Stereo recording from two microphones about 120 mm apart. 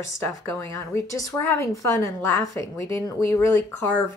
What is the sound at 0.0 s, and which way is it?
A woman's voice, 20° left (ahead or behind).